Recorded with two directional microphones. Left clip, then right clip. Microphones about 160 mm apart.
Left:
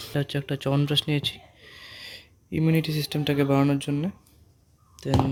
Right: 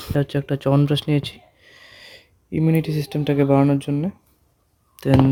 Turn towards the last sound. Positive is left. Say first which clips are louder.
# right 9 dB
turn(degrees=-55)  # may be behind; listen again after turning